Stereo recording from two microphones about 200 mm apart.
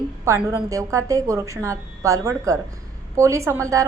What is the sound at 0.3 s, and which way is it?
A woman's voice, 10° right (ahead or behind).